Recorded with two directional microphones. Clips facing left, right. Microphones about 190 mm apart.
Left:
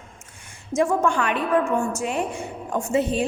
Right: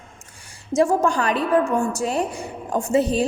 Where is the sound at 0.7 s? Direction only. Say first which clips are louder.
Right 2 dB; 35° right (ahead or behind).